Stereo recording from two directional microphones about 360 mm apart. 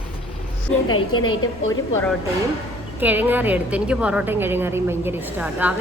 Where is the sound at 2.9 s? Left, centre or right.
Centre.